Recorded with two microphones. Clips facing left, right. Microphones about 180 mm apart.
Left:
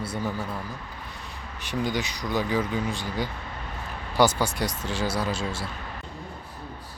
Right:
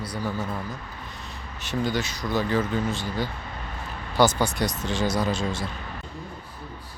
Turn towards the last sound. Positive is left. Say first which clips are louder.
# right 3 dB
turn(degrees=10)  # may be behind; listen again after turning